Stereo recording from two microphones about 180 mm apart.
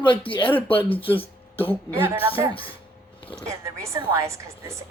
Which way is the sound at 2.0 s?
10° right (ahead or behind).